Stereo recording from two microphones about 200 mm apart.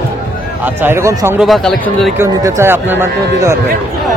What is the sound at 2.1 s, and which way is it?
Speech, 15° right (ahead or behind).